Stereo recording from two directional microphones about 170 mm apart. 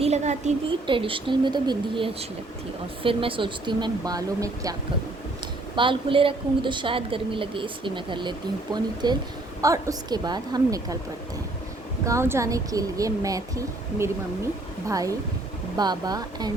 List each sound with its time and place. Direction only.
0.0 s speech: 40° right (ahead or behind)
0.7 s a woman's voice: 30° right (ahead or behind)
5.7 s a woman's voice: 30° right (ahead or behind)
12.0 s a woman's voice: 15° right (ahead or behind)